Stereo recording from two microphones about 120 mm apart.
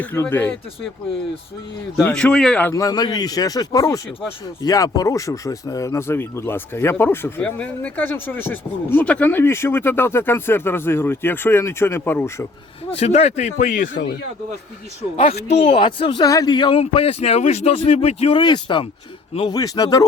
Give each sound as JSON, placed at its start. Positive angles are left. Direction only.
{"t": 0.0, "sound": "speech", "side_deg": 15}
{"t": 2.0, "sound": "speech", "side_deg": 10}
{"t": 2.7, "sound": "speech", "side_deg": 30}
{"t": 13.0, "sound": "a man's voice", "side_deg": 60}
{"t": 15.1, "sound": "speech", "side_deg": 65}
{"t": 15.7, "sound": "a man's voice", "side_deg": 40}
{"t": 18.3, "sound": "speech", "side_deg": 40}